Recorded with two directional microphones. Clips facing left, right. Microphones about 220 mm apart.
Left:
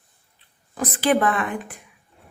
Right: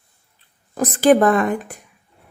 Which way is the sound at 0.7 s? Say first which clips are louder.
Right 7 dB; 45° right (ahead or behind).